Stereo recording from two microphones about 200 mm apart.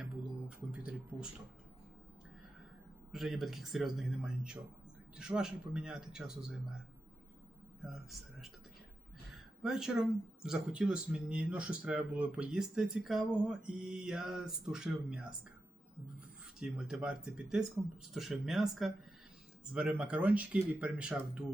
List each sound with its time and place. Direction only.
0.0 s speech: 5° right (ahead or behind)
3.1 s speech: centre (ahead or behind)
9.6 s speech: 5° right (ahead or behind)
16.6 s speech: 5° right (ahead or behind)